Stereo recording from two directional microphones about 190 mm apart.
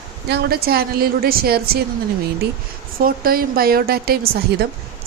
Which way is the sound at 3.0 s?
50° right (ahead or behind).